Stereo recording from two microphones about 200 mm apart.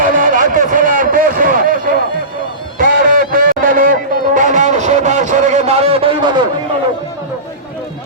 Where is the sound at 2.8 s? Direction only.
40° right (ahead or behind).